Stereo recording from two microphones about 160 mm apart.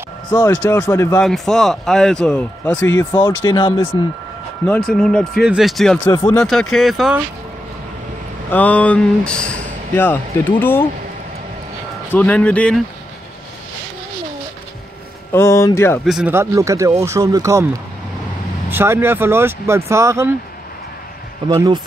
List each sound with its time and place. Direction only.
0.5 s speech: 10° left (ahead or behind)
1.2 s a man's voice: centre (ahead or behind)
3.1 s speech: 30° left (ahead or behind)
4.6 s a man's voice: 5° left (ahead or behind)
6.0 s speech: 20° left (ahead or behind)
6.3 s a man's voice: centre (ahead or behind)
8.5 s speech: 10° left (ahead or behind)
12.1 s speech: 10° left (ahead or behind)
15.3 s speech: 15° left (ahead or behind)
16.1 s a man's voice: 5° right (ahead or behind)
16.3 s speech: 20° right (ahead or behind)
18.7 s speech: 15° right (ahead or behind)
21.5 s speech: 25° right (ahead or behind)